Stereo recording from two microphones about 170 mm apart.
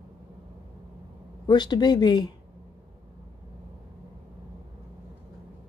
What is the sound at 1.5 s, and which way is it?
Speech, 25° left (ahead or behind).